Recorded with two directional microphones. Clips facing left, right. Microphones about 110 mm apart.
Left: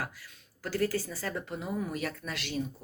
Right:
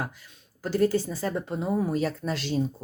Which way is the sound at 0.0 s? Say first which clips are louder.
Right 4 dB; 25° right (ahead or behind).